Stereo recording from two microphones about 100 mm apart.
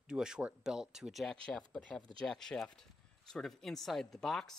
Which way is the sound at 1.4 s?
10° left (ahead or behind).